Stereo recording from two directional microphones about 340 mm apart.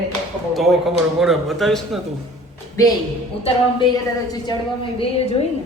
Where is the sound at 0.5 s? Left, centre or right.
Centre.